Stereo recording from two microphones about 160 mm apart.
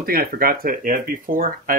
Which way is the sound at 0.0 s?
65° right (ahead or behind).